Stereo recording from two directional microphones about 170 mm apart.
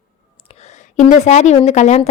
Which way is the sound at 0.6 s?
40° left (ahead or behind).